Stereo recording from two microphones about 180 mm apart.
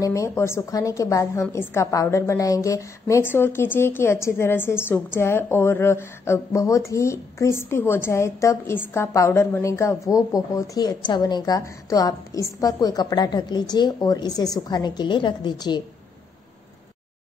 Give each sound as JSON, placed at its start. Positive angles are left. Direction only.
{"t": 0.0, "sound": "a woman's voice", "side_deg": 15}